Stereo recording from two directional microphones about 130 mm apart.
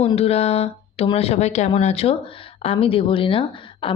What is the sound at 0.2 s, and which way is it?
Speech, 50° left (ahead or behind).